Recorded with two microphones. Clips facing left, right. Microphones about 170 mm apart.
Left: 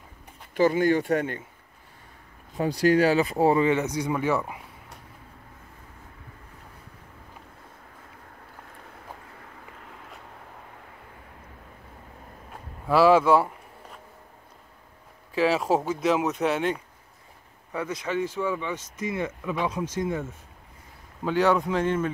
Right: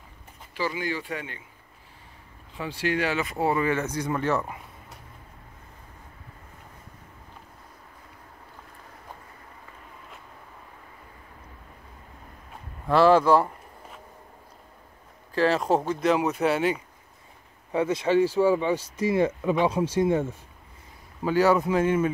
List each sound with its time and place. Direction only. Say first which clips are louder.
0.6 s speech: left 9 dB; 50° left (ahead or behind)
2.5 s speech: left 7 dB; 40° left (ahead or behind)
3.6 s speech: left 3 dB; 15° left (ahead or behind)
12.8 s a sound: even; 5° left (ahead or behind)
15.3 s speech: even; 5° left (ahead or behind)
17.7 s speech: right 7 dB; 25° right (ahead or behind)
21.2 s speech: right 1 dB; 5° right (ahead or behind)